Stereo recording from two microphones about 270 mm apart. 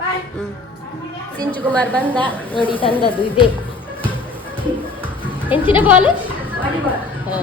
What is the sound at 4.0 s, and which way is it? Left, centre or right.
Music, centre.